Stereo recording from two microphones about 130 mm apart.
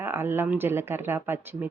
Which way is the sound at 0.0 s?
20° right (ahead or behind).